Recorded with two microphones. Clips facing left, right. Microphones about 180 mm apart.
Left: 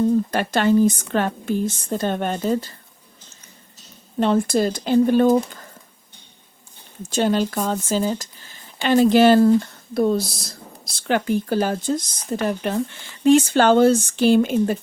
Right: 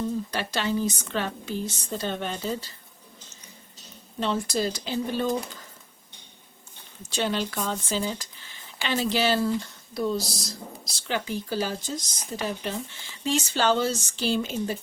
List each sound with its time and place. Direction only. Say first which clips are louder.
0.0 s speech: left 10 dB; 50° left (ahead or behind)
4.2 s speech: left 8 dB; 55° left (ahead or behind)
7.1 s speech: left 8 dB; 45° left (ahead or behind)